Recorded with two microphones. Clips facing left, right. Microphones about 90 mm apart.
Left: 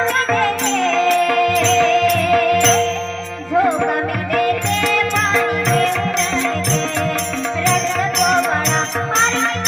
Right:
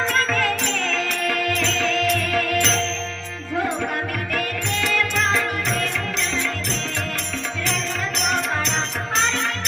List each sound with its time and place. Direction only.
0.3 s music: 35° left (ahead or behind)
5.3 s music: 55° left (ahead or behind)
8.2 s music: 45° left (ahead or behind)